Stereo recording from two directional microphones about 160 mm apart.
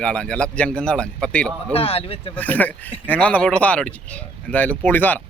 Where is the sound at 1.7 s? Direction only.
35° left (ahead or behind).